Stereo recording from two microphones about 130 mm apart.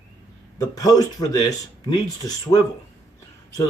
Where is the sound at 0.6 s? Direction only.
25° left (ahead or behind).